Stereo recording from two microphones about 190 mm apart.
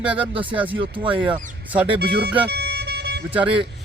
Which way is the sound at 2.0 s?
60° right (ahead or behind).